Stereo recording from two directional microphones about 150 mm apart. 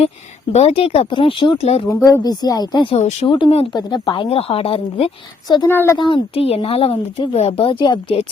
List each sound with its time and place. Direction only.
0.5 s a woman's voice: 40° left (ahead or behind)
1.9 s speech: 20° left (ahead or behind)
2.9 s speech: 45° left (ahead or behind)
3.2 s a woman's voice: 35° left (ahead or behind)
5.6 s a woman's voice: 15° left (ahead or behind)
6.0 s a woman's voice: 30° left (ahead or behind)